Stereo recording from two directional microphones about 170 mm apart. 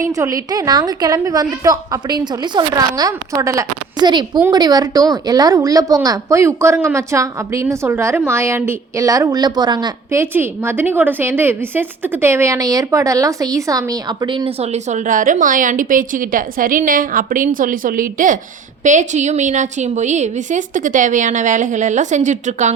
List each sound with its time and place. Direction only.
0.0 s a woman's voice: 20° right (ahead or behind); by 22.7 s 45° right (ahead or behind)